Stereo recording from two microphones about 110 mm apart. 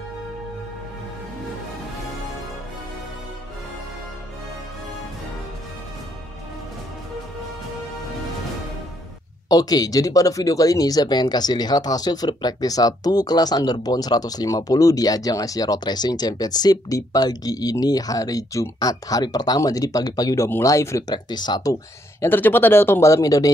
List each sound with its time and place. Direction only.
9.5 s speech: 35° left (ahead or behind)
20.4 s speech: 25° left (ahead or behind)
21.1 s speech: 40° left (ahead or behind)
22.2 s speech: 20° left (ahead or behind)